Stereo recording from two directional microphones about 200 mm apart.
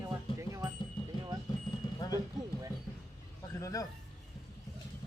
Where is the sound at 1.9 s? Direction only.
20° left (ahead or behind).